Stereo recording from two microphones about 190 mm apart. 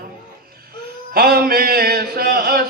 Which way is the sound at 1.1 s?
50° right (ahead or behind).